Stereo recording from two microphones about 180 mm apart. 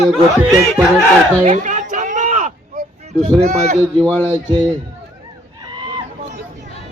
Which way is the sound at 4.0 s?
5° left (ahead or behind).